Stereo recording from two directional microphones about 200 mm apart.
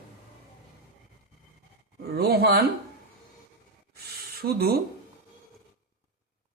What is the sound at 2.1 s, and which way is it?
Speech, 50° right (ahead or behind).